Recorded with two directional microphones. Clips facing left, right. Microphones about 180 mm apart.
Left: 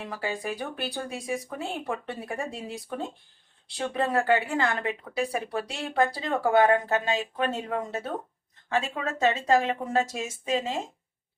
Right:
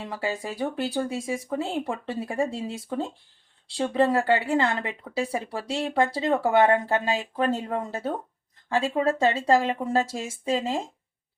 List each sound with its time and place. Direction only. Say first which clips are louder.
0.1 s speech: right 1 dB; 25° right (ahead or behind)